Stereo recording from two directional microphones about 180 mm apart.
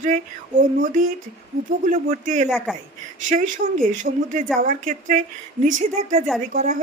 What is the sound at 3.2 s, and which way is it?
Speech, 45° right (ahead or behind).